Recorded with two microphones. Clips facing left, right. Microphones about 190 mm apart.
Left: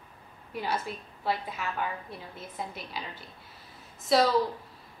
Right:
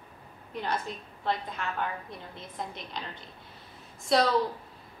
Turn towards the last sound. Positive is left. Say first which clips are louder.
# left 1 dB
turn(degrees=0)  # may be behind; listen again after turning